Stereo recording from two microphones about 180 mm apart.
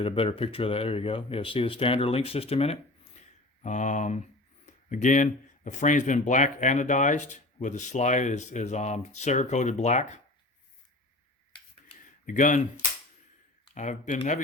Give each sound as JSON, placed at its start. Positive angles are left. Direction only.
{"t": 0.0, "sound": "speech", "side_deg": 30}
{"t": 12.2, "sound": "speech", "side_deg": 45}
{"t": 13.7, "sound": "speech", "side_deg": 40}